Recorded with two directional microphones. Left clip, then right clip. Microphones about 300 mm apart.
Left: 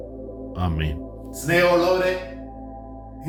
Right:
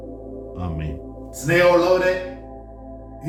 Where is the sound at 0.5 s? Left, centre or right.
Centre.